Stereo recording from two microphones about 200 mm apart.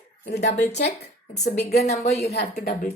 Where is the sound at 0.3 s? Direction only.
55° left (ahead or behind).